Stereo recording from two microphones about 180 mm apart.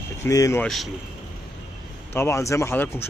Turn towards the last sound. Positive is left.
turn(degrees=15)  # may be behind; listen again after turning